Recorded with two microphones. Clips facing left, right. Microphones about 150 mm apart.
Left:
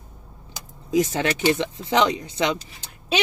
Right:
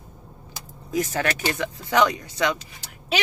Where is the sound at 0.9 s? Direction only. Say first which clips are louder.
Left 3 dB; 20° left (ahead or behind).